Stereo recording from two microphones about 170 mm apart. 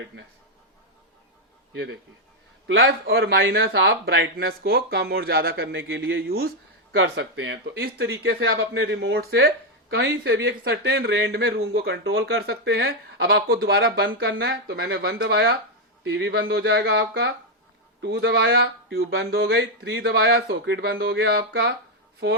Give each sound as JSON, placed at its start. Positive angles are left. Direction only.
{"t": 2.6, "sound": "a man's voice", "side_deg": -65}
{"t": 7.0, "sound": "speech", "side_deg": -90}